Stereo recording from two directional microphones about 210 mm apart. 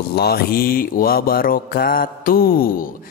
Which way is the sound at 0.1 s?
50° left (ahead or behind).